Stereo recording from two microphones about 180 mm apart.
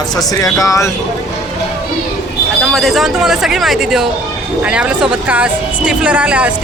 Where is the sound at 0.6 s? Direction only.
20° left (ahead or behind).